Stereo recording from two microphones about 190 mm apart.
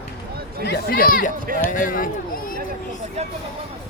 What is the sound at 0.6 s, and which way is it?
Speech, 55° left (ahead or behind).